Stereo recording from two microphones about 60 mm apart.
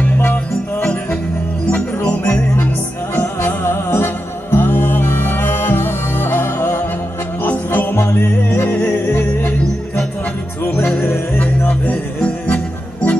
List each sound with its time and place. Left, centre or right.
0.0 s music: left
2.2 s music: left
3.6 s music: left
11.0 s music: left